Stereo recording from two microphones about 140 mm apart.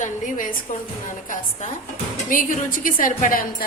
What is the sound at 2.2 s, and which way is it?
A woman's voice, 70° left (ahead or behind).